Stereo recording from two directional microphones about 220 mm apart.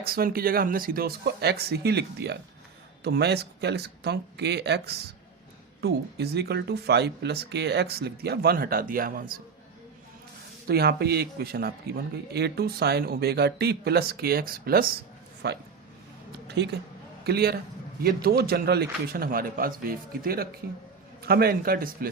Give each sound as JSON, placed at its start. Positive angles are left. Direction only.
{"t": 0.0, "sound": "speech", "side_deg": -40}
{"t": 10.7, "sound": "a man's voice", "side_deg": -45}